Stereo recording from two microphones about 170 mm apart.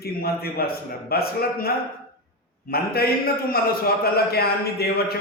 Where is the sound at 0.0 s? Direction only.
65° left (ahead or behind).